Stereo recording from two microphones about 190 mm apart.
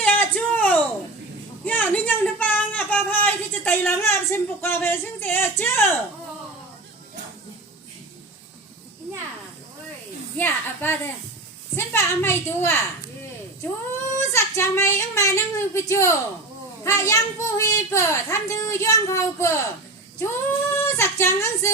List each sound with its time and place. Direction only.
0.0 s a sound: 5° left (ahead or behind)
10.3 s a child's voice: 10° left (ahead or behind)
14.2 s a child's voice: 15° left (ahead or behind)